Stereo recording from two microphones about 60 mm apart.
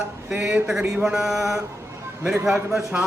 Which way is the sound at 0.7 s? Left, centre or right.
Centre.